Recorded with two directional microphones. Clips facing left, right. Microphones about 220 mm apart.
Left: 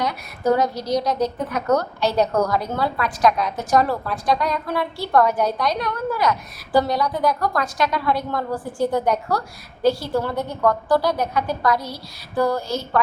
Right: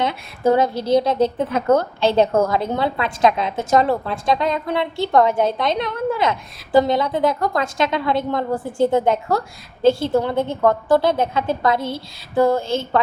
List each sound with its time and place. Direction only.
0.0 s a woman's voice: 25° right (ahead or behind)